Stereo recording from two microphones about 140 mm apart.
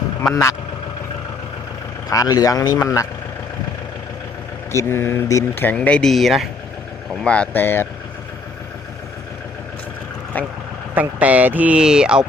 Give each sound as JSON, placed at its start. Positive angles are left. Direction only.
{"t": 2.0, "sound": "speech", "side_deg": 25}
{"t": 4.7, "sound": "speech", "side_deg": 20}
{"t": 10.3, "sound": "speech", "side_deg": 10}
{"t": 10.9, "sound": "speech", "side_deg": -10}